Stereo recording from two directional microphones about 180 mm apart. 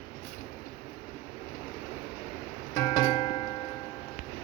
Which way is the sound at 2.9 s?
30° left (ahead or behind).